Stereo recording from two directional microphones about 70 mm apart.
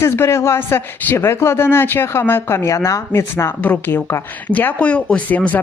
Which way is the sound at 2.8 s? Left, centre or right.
Left.